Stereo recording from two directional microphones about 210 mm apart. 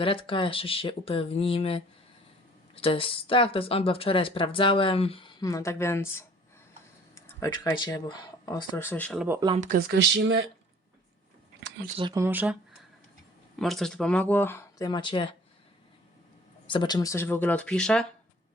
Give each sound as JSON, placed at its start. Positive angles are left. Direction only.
{"t": 0.0, "sound": "speech", "side_deg": 25}
{"t": 9.2, "sound": "speech", "side_deg": -10}
{"t": 9.6, "sound": "speech", "side_deg": -40}
{"t": 11.9, "sound": "speech", "side_deg": -20}
{"t": 13.6, "sound": "speech", "side_deg": 0}
{"t": 16.6, "sound": "speech", "side_deg": 20}